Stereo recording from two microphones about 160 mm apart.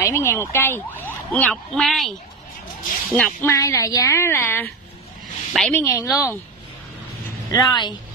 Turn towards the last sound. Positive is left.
turn(degrees=25)  # may be behind; listen again after turning